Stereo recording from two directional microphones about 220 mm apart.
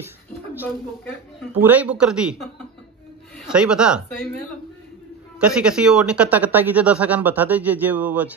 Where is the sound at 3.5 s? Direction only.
5° right (ahead or behind).